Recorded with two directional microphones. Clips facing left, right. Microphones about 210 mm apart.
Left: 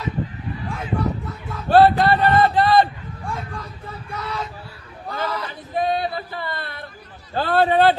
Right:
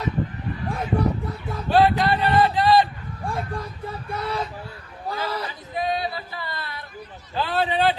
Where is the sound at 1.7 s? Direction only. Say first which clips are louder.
Left 4 dB; 50° left (ahead or behind).